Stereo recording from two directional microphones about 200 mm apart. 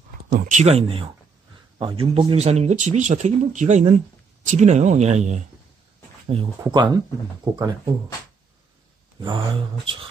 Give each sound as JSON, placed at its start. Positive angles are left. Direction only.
{"t": 0.3, "sound": "speech", "side_deg": -40}